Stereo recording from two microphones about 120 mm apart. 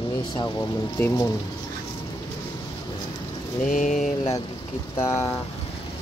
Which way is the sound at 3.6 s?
90° left.